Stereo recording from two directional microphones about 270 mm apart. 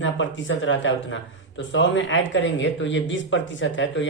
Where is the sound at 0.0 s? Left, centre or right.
Left.